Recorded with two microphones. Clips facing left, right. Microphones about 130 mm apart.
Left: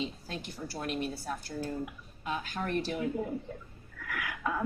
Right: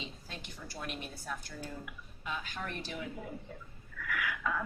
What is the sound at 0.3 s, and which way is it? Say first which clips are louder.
Speech: left 7 dB; 40° left (ahead or behind).